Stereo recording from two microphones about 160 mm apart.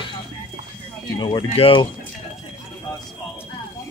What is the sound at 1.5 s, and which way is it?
Speech, 35° left (ahead or behind).